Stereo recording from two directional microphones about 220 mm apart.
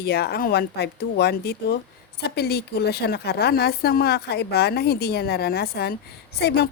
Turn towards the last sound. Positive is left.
turn(degrees=50)  # may be behind; listen again after turning